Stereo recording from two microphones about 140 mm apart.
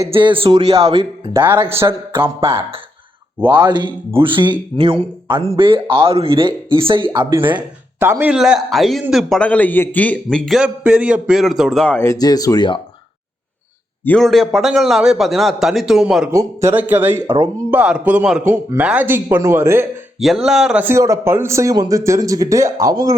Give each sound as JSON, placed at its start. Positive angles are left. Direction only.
{"t": 0.1, "sound": "speech", "side_deg": -40}
{"t": 1.3, "sound": "a man's voice", "side_deg": -15}
{"t": 3.6, "sound": "speech", "side_deg": -35}
{"t": 7.9, "sound": "a man's voice", "side_deg": -15}
{"t": 9.4, "sound": "a man's voice", "side_deg": 10}
{"t": 12.0, "sound": "speech", "side_deg": 25}
{"t": 14.0, "sound": "a man's voice", "side_deg": 5}
{"t": 16.3, "sound": "a man's voice", "side_deg": -20}
{"t": 20.1, "sound": "a man's voice", "side_deg": 0}
{"t": 20.8, "sound": "a man's voice", "side_deg": -20}